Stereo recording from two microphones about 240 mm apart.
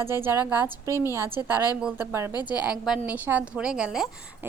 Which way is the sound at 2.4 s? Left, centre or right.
Centre.